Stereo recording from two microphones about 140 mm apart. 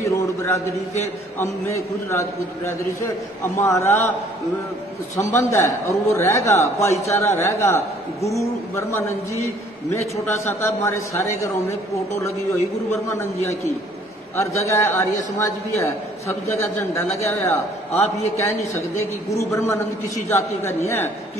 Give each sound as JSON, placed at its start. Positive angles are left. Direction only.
{"t": 0.0, "sound": "a man's voice", "side_deg": 20}
{"t": 5.1, "sound": "a man's voice", "side_deg": 20}
{"t": 10.2, "sound": "a man's voice", "side_deg": 20}
{"t": 13.2, "sound": "a man's voice", "side_deg": 20}
{"t": 14.7, "sound": "a man's voice", "side_deg": 20}